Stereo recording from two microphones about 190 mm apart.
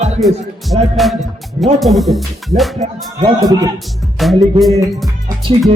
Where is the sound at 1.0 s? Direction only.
Centre (ahead or behind).